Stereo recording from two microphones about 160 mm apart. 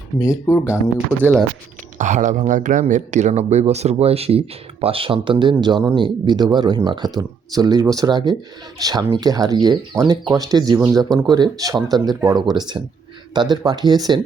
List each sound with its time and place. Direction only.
0.2 s speech: 20° left (ahead or behind)
0.9 s speech: 15° right (ahead or behind)
2.0 s speech: 50° right (ahead or behind); by 14.2 s 25° right (ahead or behind)